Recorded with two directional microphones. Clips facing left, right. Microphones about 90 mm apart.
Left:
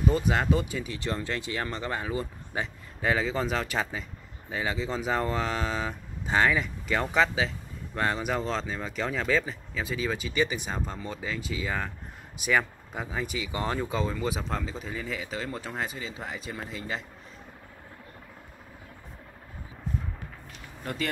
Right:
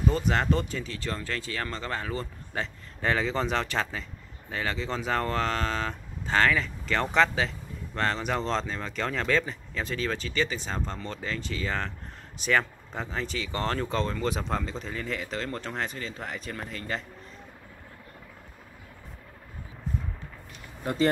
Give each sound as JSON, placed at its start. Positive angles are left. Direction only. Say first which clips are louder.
{"t": 0.1, "sound": "speech", "louder": "even", "side_deg": 10}
{"t": 20.8, "sound": "speech", "louder": "right 7 dB", "side_deg": -25}